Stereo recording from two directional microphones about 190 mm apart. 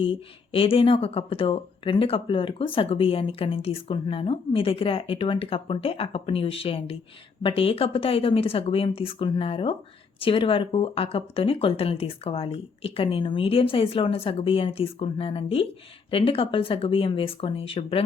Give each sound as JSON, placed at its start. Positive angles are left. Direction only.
{"t": 0.0, "sound": "speech", "side_deg": 30}